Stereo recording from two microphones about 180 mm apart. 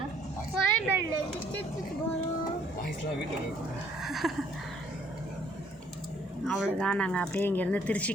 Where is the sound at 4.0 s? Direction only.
Centre (ahead or behind).